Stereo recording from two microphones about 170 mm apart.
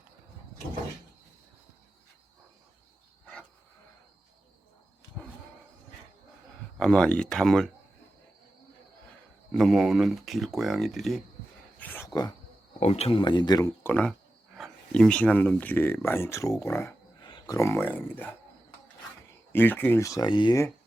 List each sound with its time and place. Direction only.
6.7 s speech: 5° left (ahead or behind)
9.5 s speech: centre (ahead or behind)
11.8 s a sound: 10° left (ahead or behind)
12.8 s speech: 40° left (ahead or behind); by 13.9 s 20° left (ahead or behind)
13.9 s speech: 5° left (ahead or behind)
19.5 s speech: 10° left (ahead or behind)